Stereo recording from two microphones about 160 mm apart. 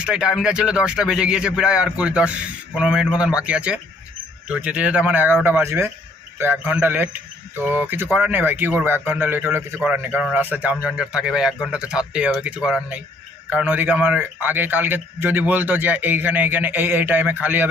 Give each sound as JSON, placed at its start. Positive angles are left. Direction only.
{"t": 0.0, "sound": "a man's voice", "side_deg": -5}